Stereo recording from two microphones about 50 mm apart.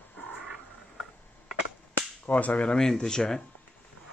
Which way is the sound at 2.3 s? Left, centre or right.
Left.